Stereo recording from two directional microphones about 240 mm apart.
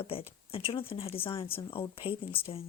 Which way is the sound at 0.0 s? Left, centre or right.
Left.